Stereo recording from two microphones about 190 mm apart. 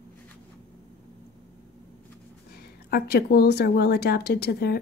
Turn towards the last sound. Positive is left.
turn(degrees=55)  # may be behind; listen again after turning